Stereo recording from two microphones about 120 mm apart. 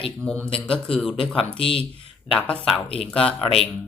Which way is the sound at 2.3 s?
5° left (ahead or behind).